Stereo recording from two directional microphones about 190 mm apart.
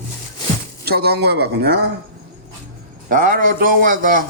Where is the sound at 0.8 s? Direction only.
55° right (ahead or behind).